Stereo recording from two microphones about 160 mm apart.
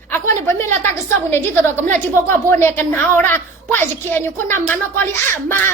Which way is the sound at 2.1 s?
15° left (ahead or behind).